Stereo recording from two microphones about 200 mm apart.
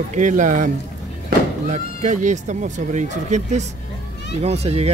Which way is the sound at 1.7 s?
35° right (ahead or behind).